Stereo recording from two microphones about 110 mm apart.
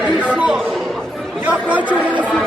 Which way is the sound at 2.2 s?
10° left (ahead or behind).